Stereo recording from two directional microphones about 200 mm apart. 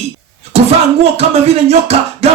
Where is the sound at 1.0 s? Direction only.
30° right (ahead or behind).